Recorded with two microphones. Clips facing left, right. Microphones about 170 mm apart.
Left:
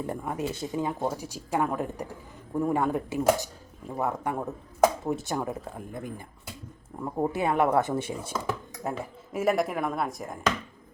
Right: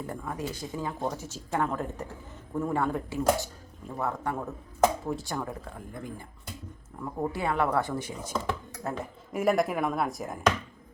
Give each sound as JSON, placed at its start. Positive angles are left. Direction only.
{"t": 0.1, "sound": "speech", "side_deg": 20}
{"t": 9.3, "sound": "speech", "side_deg": 0}